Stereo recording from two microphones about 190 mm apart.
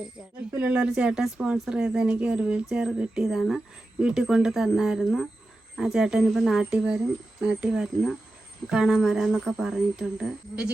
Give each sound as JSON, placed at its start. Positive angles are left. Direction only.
{"t": 0.5, "sound": "a woman's voice", "side_deg": -5}